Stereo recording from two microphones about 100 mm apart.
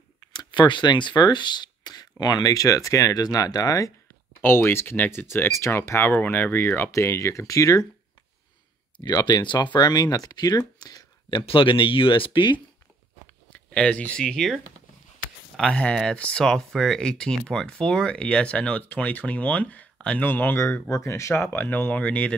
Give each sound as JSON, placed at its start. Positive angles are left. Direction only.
{"t": 0.2, "sound": "a sound", "side_deg": 40}
{"t": 0.5, "sound": "speech", "side_deg": 50}
{"t": 4.4, "sound": "speech", "side_deg": 20}
{"t": 8.9, "sound": "speech", "side_deg": 50}
{"t": 10.8, "sound": "a sound", "side_deg": 40}
{"t": 11.2, "sound": "speech", "side_deg": 55}
{"t": 13.5, "sound": "speech", "side_deg": 10}